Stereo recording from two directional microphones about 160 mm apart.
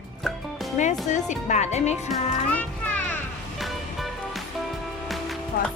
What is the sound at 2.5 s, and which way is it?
Music, 10° left (ahead or behind).